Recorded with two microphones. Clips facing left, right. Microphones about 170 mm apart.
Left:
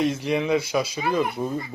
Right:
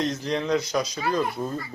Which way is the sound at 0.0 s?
10° left (ahead or behind).